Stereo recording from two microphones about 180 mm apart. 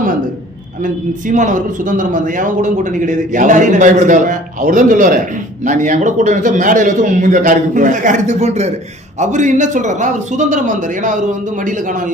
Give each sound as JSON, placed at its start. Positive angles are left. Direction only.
{"t": 1.3, "sound": "a man's voice", "side_deg": -45}